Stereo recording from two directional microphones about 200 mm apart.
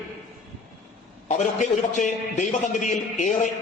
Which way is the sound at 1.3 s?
35° left (ahead or behind).